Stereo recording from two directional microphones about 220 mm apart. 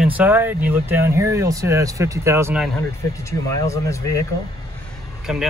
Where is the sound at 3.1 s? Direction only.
15° left (ahead or behind).